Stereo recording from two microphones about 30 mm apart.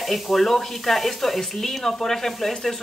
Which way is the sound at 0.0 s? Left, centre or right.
Centre.